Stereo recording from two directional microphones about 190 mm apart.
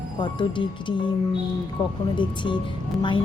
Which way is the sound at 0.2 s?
25° left (ahead or behind).